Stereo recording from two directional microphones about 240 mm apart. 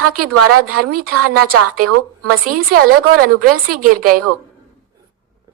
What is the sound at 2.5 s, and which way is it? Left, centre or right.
A woman's voice, right.